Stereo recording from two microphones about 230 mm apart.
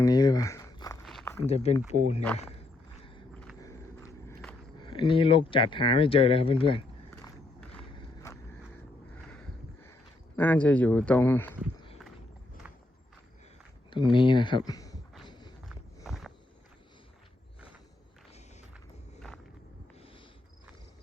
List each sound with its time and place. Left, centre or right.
0.0 s a sound: centre
1.5 s speech: left
2.4 s walk: left
4.8 s speech: left
7.9 s walk: centre
9.3 s a sound: centre
10.3 s speech: centre
13.9 s speech: left
14.7 s a sound: centre
15.3 s walk: centre
16.0 s walk: centre